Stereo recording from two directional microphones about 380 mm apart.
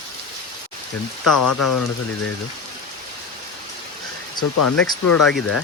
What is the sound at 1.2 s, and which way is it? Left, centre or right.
Speech, left.